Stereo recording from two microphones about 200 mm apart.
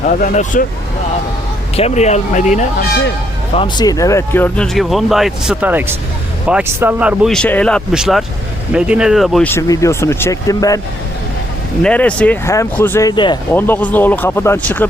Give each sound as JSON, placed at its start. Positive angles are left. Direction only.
{"t": 0.0, "sound": "speech", "side_deg": 45}
{"t": 1.7, "sound": "speech", "side_deg": 35}
{"t": 3.5, "sound": "speech", "side_deg": 25}
{"t": 9.5, "sound": "speech", "side_deg": 15}
{"t": 11.8, "sound": "speech", "side_deg": 5}
{"t": 13.5, "sound": "speech", "side_deg": 10}